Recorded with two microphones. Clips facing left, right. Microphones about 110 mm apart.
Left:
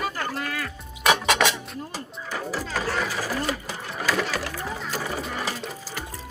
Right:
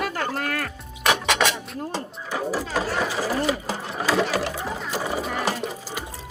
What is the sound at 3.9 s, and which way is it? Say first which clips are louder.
Sewing machine: right 3 dB; 30° right (ahead or behind).